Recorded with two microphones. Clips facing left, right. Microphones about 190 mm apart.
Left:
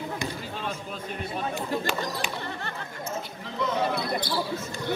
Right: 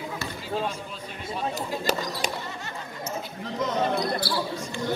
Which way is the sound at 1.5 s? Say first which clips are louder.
Right 1 dB; 40° right (ahead or behind).